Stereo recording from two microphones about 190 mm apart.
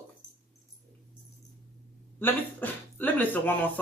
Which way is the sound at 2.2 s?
10° left (ahead or behind).